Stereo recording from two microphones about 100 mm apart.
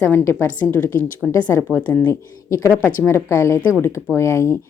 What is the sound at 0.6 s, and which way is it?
A woman's voice, 20° left (ahead or behind).